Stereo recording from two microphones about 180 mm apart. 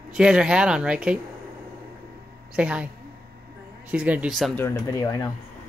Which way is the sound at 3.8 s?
10° right (ahead or behind).